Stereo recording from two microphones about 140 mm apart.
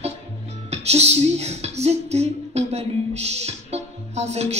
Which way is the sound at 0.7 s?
50° right (ahead or behind).